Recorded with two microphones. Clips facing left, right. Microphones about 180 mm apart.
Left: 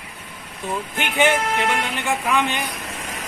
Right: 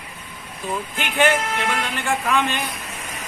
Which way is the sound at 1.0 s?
20° left (ahead or behind).